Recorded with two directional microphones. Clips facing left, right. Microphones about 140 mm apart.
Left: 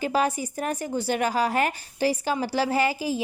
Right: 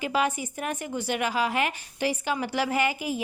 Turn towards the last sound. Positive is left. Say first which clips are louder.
# left 2 dB
turn(degrees=35)  # may be behind; listen again after turning